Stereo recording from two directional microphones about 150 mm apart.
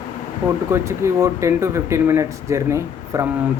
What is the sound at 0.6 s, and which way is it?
Speech, 20° right (ahead or behind).